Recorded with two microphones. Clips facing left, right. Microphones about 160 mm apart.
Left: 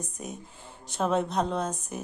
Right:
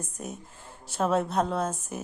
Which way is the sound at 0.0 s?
5° right (ahead or behind).